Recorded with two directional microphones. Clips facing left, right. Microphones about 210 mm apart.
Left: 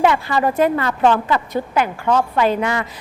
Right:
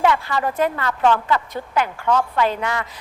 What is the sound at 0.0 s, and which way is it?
A woman's voice, 15° left (ahead or behind).